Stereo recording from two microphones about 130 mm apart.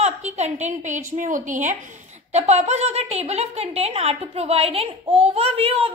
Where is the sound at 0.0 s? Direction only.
60° right (ahead or behind); by 1.8 s 75° right (ahead or behind).